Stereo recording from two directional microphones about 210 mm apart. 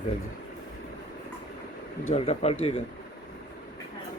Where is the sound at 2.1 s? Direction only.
30° left (ahead or behind).